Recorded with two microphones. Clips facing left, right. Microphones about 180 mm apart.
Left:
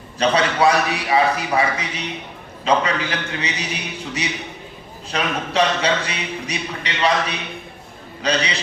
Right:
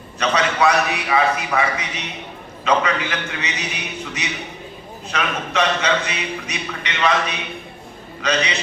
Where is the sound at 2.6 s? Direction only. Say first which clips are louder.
Even; 30° left (ahead or behind).